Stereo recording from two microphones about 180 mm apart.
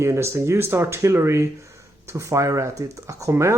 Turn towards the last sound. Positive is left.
turn(degrees=-15)  # may be behind; listen again after turning